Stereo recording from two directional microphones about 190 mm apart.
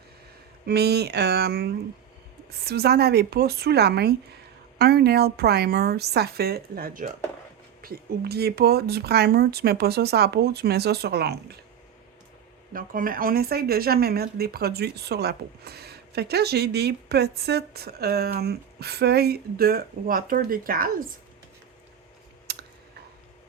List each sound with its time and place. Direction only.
0.6 s speech: 60° right (ahead or behind)
12.7 s speech: 45° right (ahead or behind)
22.5 s a sound: 60° right (ahead or behind)